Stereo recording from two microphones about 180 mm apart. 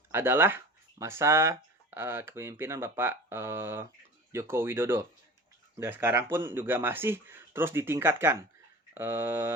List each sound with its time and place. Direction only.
0.1 s speech: 15° right (ahead or behind)